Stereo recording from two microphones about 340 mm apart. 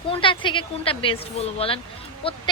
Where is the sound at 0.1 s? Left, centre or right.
Centre.